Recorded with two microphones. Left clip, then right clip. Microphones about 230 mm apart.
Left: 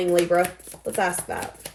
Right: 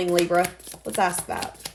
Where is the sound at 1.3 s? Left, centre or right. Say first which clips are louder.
Even; right.